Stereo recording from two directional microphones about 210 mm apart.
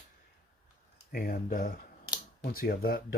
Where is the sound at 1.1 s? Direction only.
45° left (ahead or behind).